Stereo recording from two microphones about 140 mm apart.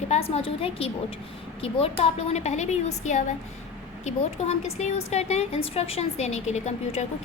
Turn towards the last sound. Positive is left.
turn(degrees=55)  # may be behind; listen again after turning